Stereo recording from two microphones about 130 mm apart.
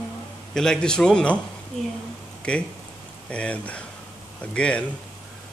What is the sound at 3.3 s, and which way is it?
Speech, 10° left (ahead or behind).